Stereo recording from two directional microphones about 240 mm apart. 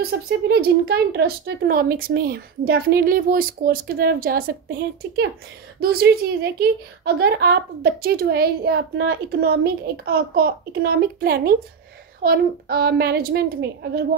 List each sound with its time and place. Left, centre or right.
0.0 s speech: right